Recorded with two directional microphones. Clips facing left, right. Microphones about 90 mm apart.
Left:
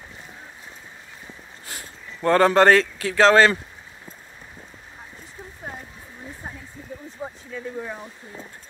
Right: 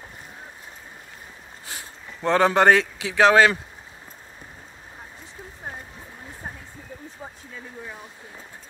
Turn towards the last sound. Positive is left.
turn(degrees=0)  # may be behind; listen again after turning